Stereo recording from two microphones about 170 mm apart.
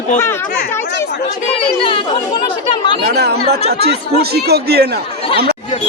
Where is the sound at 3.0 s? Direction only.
70° right (ahead or behind).